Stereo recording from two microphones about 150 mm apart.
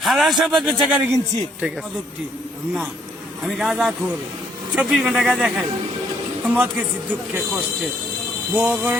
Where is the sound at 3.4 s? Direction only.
Centre (ahead or behind).